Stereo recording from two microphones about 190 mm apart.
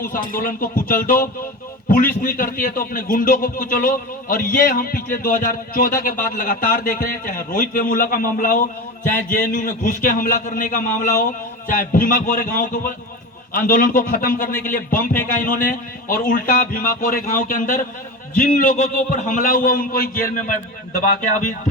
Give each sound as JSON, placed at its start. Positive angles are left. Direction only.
{"t": 0.0, "sound": "a man's voice", "side_deg": 45}